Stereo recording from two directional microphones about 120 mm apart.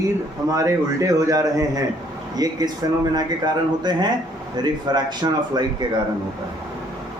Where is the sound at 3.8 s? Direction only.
40° right (ahead or behind).